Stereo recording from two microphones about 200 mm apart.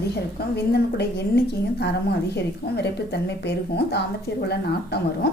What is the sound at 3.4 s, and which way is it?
Speech, 55° left (ahead or behind).